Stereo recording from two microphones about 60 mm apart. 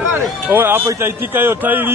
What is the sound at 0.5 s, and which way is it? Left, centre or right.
Run, right.